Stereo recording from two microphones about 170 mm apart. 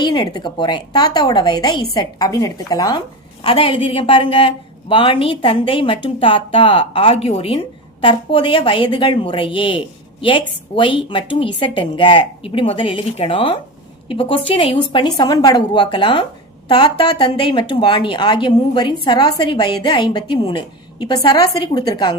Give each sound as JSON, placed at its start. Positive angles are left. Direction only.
{"t": 0.0, "sound": "a woman's voice", "side_deg": 25}